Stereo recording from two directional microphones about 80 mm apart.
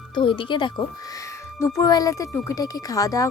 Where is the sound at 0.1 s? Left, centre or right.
Left.